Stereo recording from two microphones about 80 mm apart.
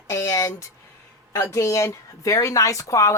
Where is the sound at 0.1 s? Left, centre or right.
Left.